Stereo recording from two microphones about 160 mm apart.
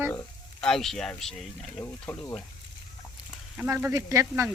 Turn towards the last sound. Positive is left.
turn(degrees=-20)  # may be behind; listen again after turning